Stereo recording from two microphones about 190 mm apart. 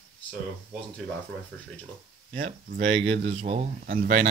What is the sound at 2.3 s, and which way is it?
Speech, 45° right (ahead or behind).